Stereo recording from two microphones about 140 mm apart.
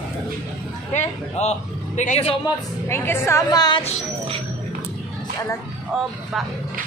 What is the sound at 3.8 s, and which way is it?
Speech, 50° left (ahead or behind).